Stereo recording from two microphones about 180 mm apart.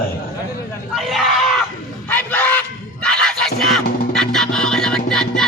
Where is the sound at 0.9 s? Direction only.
Centre (ahead or behind).